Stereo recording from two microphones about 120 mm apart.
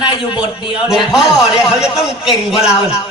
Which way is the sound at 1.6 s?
5° right (ahead or behind).